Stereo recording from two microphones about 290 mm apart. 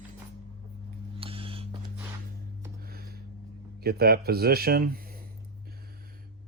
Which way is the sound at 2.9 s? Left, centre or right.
Right.